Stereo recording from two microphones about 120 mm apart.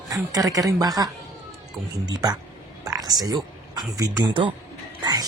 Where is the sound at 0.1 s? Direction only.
30° right (ahead or behind).